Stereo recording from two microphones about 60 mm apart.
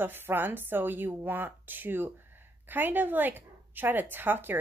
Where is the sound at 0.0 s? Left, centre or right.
Right.